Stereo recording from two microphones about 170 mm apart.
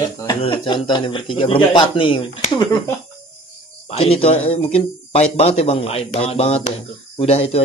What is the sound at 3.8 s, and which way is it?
Speech, 35° left (ahead or behind).